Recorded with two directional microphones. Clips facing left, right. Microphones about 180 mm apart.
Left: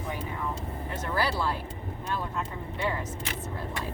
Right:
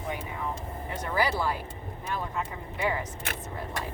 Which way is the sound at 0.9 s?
15° right (ahead or behind).